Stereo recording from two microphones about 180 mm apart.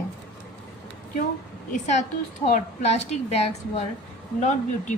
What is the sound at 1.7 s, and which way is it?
A woman's voice, 45° left (ahead or behind).